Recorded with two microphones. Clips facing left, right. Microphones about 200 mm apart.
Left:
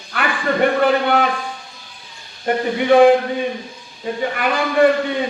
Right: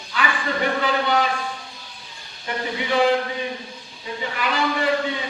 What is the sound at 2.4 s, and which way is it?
Speech, 55° left (ahead or behind).